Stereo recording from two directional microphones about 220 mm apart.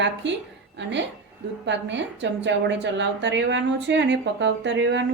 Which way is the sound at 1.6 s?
55° right (ahead or behind).